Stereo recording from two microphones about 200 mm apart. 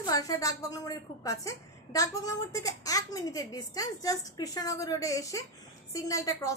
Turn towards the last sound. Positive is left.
turn(degrees=15)  # may be behind; listen again after turning